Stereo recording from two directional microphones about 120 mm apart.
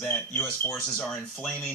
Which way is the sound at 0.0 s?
10° left (ahead or behind).